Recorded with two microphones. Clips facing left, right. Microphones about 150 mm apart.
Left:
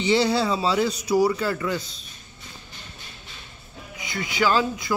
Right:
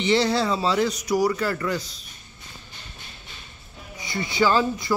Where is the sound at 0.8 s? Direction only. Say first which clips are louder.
Left 2 dB; 30° left (ahead or behind).